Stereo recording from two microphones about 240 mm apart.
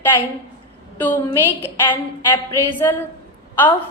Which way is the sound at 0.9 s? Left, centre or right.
Centre.